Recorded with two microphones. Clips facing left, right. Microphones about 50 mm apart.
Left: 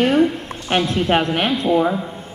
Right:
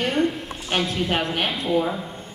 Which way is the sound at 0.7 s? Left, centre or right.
Left.